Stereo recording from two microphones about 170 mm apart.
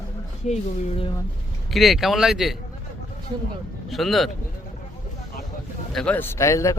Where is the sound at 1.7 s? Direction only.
Centre (ahead or behind).